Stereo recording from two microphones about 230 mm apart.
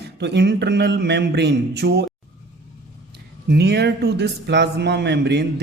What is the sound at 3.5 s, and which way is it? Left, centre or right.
Speech, right.